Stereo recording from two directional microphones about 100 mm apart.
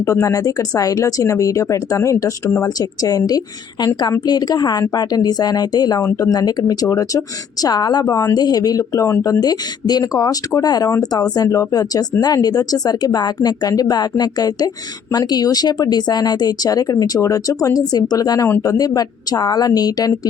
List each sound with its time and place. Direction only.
0.0 s speech: 30° left (ahead or behind)